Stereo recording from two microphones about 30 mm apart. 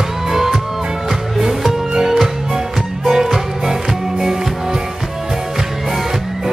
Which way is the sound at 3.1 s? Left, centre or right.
Centre.